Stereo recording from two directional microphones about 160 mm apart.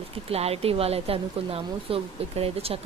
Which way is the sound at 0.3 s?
40° right (ahead or behind).